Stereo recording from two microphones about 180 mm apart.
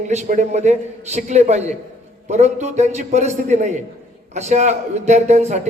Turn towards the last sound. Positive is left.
turn(degrees=-40)  # may be behind; listen again after turning